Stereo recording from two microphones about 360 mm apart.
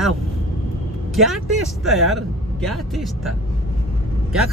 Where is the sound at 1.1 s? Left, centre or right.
Centre.